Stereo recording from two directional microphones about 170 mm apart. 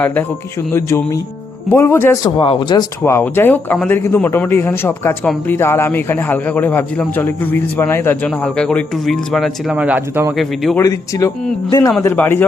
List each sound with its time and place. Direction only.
0.0 s a man's voice: 10° left (ahead or behind)
2.2 s speech: 30° left (ahead or behind)
3.0 s a man's voice: 15° left (ahead or behind); by 10.3 s 10° right (ahead or behind)
10.3 s speech: centre (ahead or behind)
10.8 s a man's voice: 20° left (ahead or behind)
11.9 s a man's voice: 10° left (ahead or behind)